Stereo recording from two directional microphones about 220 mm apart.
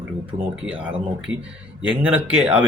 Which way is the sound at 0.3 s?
30° right (ahead or behind).